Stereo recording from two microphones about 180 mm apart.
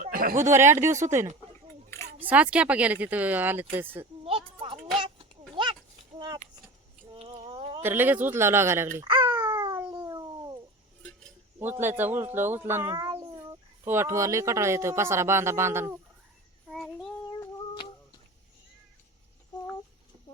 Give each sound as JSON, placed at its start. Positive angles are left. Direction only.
{"t": 0.0, "sound": "a sound", "side_deg": -50}
{"t": 0.5, "sound": "speech", "side_deg": -15}
{"t": 4.2, "sound": "a sound", "side_deg": -30}
{"t": 7.8, "sound": "speech", "side_deg": -10}
{"t": 9.0, "sound": "babbling", "side_deg": -25}
{"t": 9.5, "sound": "cat", "side_deg": -25}
{"t": 11.6, "sound": "speech", "side_deg": -10}
{"t": 16.6, "sound": "child singing", "side_deg": 0}